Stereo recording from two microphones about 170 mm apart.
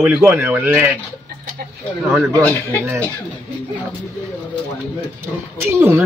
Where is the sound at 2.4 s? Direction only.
15° left (ahead or behind).